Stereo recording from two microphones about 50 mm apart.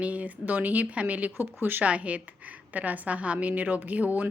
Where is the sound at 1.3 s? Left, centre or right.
Right.